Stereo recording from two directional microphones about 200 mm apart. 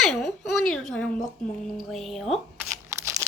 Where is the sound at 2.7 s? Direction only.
15° right (ahead or behind).